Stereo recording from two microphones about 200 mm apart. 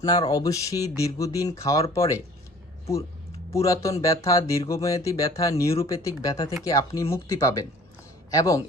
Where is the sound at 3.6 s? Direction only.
15° left (ahead or behind).